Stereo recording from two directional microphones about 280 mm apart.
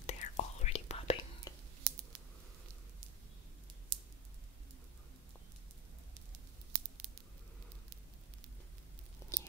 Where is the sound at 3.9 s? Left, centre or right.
Right.